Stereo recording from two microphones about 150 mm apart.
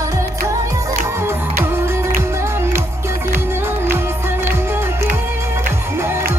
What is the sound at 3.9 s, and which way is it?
Music, 15° right (ahead or behind).